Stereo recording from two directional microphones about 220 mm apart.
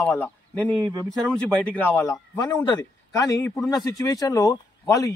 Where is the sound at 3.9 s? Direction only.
15° left (ahead or behind).